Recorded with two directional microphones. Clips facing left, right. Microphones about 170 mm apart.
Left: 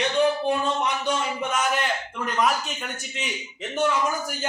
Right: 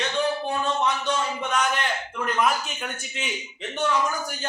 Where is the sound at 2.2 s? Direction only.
Centre (ahead or behind).